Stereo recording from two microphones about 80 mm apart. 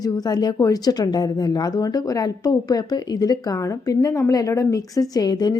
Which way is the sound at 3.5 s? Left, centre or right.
Left.